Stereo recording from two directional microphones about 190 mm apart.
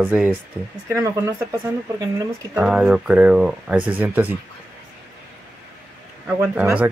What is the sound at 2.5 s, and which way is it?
Speech, 5° right (ahead or behind).